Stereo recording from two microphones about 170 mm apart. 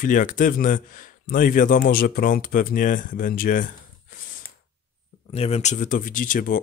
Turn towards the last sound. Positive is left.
turn(degrees=55)  # may be behind; listen again after turning